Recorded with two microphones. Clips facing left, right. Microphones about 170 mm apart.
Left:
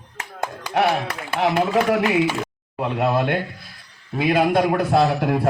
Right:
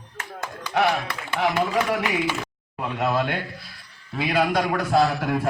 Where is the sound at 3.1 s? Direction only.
50° left (ahead or behind).